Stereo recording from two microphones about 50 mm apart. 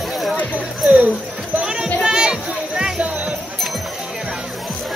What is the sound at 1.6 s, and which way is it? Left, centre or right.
Music, centre.